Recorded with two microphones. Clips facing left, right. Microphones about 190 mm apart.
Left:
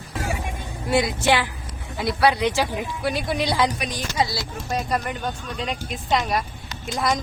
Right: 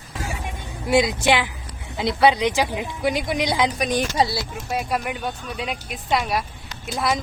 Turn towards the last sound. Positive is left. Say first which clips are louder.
# even
turn(degrees=-5)  # may be behind; listen again after turning